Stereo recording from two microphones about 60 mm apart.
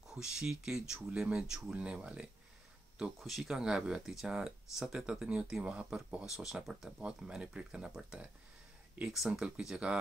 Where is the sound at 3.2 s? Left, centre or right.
Centre.